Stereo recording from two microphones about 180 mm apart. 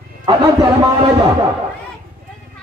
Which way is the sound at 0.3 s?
25° right (ahead or behind).